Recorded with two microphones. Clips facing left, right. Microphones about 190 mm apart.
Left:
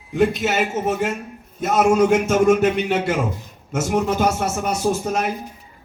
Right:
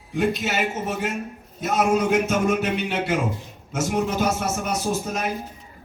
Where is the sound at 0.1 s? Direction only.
50° left (ahead or behind).